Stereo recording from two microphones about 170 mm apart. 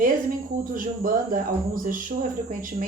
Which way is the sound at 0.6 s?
55° right (ahead or behind).